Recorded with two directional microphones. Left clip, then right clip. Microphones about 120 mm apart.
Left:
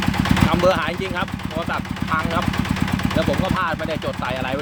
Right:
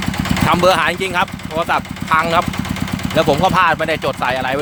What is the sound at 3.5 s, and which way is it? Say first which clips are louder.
Speech: right 9 dB; 45° right (ahead or behind).